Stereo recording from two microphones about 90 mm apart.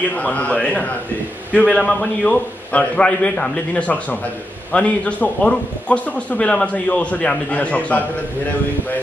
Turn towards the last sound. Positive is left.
turn(degrees=15)  # may be behind; listen again after turning